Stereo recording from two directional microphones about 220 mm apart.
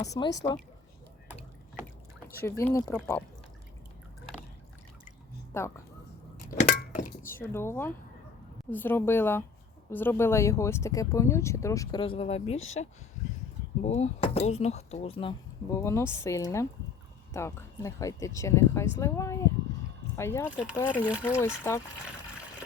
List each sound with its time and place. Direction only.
0.0 s speech: 15° left (ahead or behind)
2.5 s speech: 10° left (ahead or behind)
5.5 s speech: 10° left (ahead or behind)
6.6 s a sound: 35° left (ahead or behind)
7.3 s speech: 10° left (ahead or behind); by 12.5 s 30° left (ahead or behind)
13.8 s speech: 30° left (ahead or behind); by 21.8 s 10° left (ahead or behind)